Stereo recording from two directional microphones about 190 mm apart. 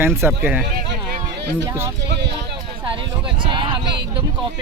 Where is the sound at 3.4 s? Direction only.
25° right (ahead or behind).